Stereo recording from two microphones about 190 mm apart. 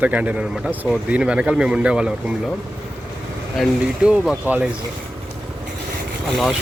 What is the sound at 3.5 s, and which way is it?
Speech, 5° right (ahead or behind).